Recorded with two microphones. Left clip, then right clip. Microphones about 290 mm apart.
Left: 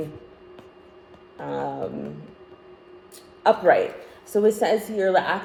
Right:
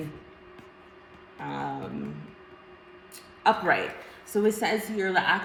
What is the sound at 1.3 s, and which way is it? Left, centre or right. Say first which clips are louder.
Chopping: left 5 dB; centre.